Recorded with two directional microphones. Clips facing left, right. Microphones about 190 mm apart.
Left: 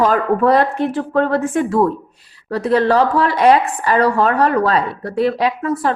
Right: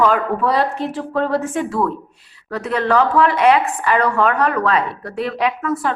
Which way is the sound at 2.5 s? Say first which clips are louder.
Left 4 dB; 35° left (ahead or behind).